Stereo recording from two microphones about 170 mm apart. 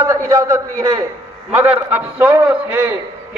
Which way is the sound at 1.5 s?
10° right (ahead or behind).